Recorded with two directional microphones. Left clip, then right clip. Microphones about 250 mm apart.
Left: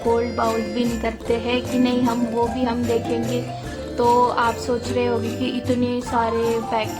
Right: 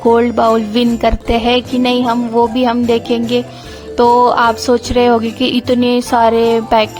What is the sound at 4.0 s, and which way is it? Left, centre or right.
Speech, right.